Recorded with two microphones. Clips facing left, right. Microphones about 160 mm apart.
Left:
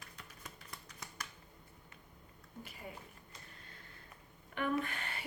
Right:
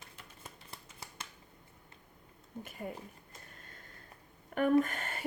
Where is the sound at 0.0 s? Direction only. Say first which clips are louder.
Right 1 dB; 30° right (ahead or behind).